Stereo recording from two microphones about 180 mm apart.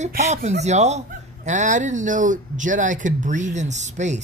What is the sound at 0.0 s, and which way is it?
Speech, 40° right (ahead or behind).